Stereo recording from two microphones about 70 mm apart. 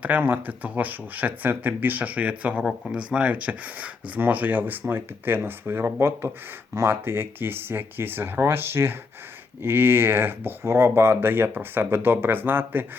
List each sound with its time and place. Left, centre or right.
0.0 s speech: right